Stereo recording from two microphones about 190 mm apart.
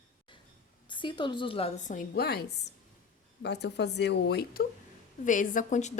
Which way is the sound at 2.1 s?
55° left (ahead or behind).